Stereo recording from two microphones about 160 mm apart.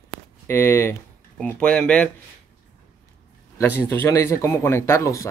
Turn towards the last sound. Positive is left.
turn(degrees=20)  # may be behind; listen again after turning